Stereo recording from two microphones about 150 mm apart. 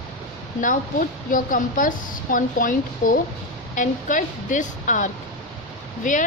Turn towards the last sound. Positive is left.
turn(degrees=60)  # may be behind; listen again after turning